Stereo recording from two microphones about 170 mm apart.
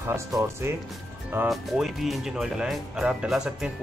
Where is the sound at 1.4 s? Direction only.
Centre (ahead or behind).